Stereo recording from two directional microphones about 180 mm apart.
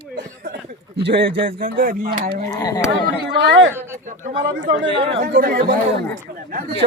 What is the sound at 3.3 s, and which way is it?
Speech, 90° right.